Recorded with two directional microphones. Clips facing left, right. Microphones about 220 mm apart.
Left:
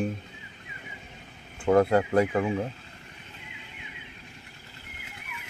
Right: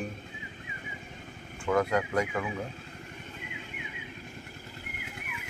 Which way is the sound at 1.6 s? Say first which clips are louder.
Left 6 dB; 35° left (ahead or behind).